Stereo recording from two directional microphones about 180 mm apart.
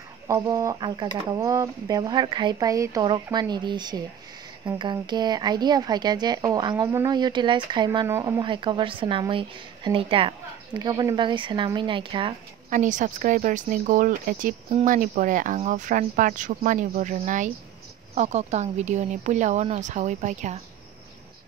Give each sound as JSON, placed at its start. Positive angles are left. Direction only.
{"t": 0.3, "sound": "a woman's voice", "side_deg": -20}
{"t": 8.5, "sound": "a woman's voice", "side_deg": -25}
{"t": 12.6, "sound": "speech", "side_deg": -45}